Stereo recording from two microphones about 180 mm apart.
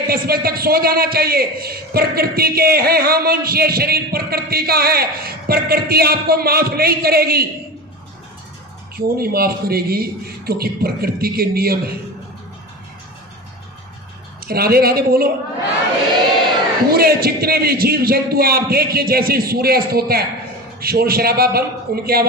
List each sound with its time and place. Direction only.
0.1 s a man's voice: 55° right (ahead or behind)
9.0 s a man's voice: 55° right (ahead or behind)
14.4 s a man's voice: 60° right (ahead or behind)
16.9 s a man's voice: 60° right (ahead or behind)